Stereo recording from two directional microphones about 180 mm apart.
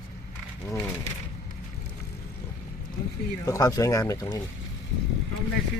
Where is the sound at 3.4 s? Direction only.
20° left (ahead or behind).